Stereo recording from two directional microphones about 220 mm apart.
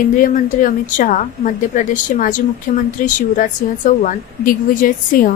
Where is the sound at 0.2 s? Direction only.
35° left (ahead or behind).